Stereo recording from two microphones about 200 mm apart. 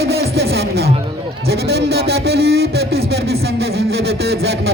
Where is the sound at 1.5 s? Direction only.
55° right (ahead or behind).